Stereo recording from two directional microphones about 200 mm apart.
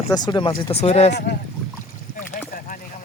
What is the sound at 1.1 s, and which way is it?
Speech, 55° left (ahead or behind).